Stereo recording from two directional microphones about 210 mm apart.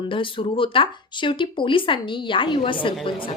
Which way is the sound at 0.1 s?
25° left (ahead or behind).